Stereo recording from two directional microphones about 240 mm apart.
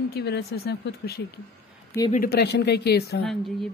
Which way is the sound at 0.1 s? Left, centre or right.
Left.